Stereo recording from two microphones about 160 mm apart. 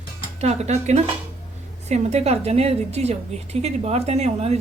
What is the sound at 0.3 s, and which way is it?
A woman's voice, 45° right (ahead or behind).